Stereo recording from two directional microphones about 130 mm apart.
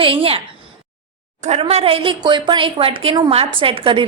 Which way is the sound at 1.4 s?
50° right (ahead or behind).